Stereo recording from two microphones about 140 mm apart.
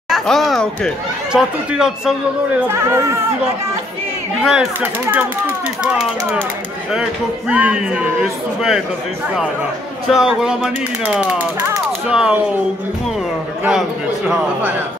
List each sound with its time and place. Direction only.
0.1 s speech: centre (ahead or behind)
2.7 s speech: 20° right (ahead or behind)
4.4 s speech: 5° right (ahead or behind)
10.0 s speech: 5° right (ahead or behind)
13.7 s speech: 5° right (ahead or behind)